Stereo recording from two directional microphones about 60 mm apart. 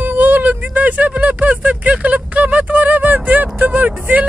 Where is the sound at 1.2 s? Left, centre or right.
Right.